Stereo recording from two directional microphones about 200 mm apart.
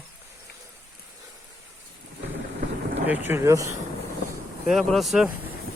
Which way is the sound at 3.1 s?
10° right (ahead or behind).